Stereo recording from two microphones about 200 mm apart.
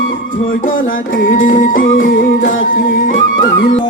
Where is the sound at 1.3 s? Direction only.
40° left (ahead or behind).